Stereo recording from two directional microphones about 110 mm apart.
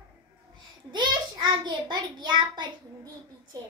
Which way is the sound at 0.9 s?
45° right (ahead or behind).